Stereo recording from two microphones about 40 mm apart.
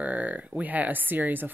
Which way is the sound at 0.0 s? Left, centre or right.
Right.